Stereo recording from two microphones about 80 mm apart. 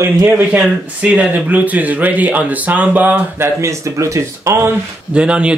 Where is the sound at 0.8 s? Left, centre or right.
Centre.